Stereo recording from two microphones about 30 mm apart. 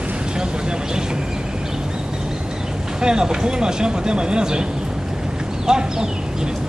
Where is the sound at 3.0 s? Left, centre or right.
Right.